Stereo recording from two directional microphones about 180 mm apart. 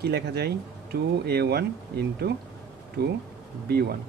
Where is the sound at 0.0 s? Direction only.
65° right (ahead or behind).